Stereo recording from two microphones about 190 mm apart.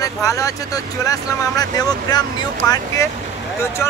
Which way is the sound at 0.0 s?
15° left (ahead or behind).